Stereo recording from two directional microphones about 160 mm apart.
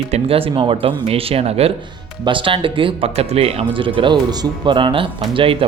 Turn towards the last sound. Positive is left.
turn(degrees=-35)  # may be behind; listen again after turning